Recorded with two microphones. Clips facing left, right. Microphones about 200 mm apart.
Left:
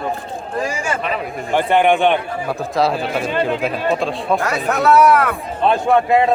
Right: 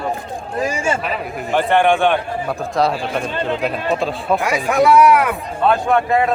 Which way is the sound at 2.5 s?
Centre (ahead or behind).